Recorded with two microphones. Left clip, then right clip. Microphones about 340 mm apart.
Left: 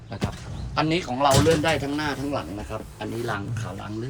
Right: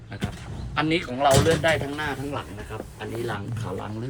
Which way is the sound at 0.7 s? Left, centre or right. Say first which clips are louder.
Even; centre.